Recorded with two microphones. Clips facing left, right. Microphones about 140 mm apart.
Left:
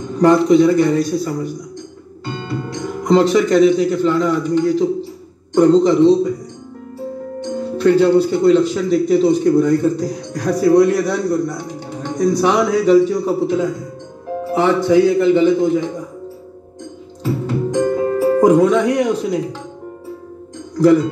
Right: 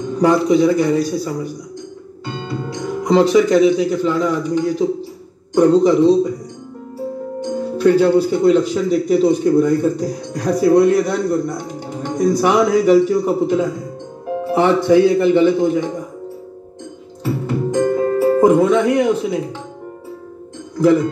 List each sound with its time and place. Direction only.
0.2 s speech: 5° right (ahead or behind)
7.4 s speech: 10° right (ahead or behind)
11.1 s a man's voice: 15° left (ahead or behind)
11.6 s music: 15° right (ahead or behind)
12.4 s speech: 5° right (ahead or behind)
12.9 s speech: 20° right (ahead or behind)
14.4 s music: 20° right (ahead or behind)
14.8 s a man's voice: 20° left (ahead or behind)
15.6 s speech: 15° right (ahead or behind)
17.5 s music: centre (ahead or behind)
20.7 s speech: 5° right (ahead or behind)